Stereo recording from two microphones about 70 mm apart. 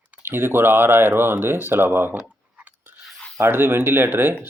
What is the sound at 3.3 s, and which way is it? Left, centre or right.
Speech, right.